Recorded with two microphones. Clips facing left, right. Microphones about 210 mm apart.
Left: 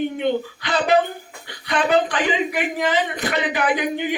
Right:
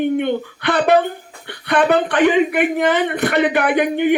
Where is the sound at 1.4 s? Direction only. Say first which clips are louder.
Right 6 dB; 60° right (ahead or behind).